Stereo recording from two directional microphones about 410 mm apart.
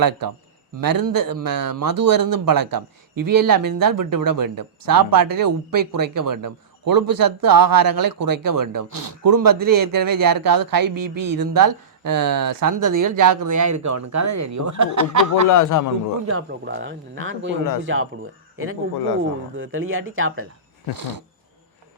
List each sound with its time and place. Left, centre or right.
0.0 s speech: right
15.4 s a man's voice: left
16.5 s speech: right
20.9 s a sound: right